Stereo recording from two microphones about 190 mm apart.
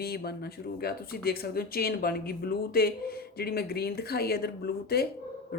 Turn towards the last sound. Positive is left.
turn(degrees=55)  # may be behind; listen again after turning